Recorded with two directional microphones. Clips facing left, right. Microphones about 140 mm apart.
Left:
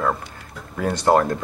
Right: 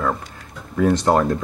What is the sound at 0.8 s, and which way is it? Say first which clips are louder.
Speech: right 1 dB; centre (ahead or behind).